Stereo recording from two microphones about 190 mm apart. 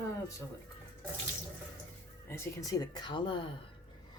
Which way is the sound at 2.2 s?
15° left (ahead or behind).